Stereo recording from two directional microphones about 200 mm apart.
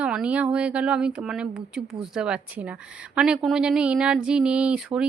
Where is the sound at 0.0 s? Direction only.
5° right (ahead or behind).